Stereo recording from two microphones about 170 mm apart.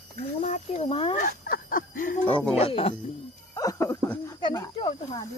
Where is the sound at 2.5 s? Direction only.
35° left (ahead or behind).